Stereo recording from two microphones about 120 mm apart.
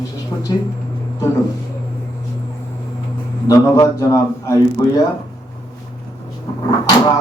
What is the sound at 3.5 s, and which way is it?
A man's voice, 30° left (ahead or behind).